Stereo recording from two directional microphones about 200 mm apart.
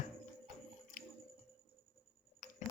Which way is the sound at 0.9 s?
40° left (ahead or behind).